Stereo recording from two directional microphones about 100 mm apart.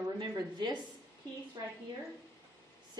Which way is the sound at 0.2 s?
45° right (ahead or behind).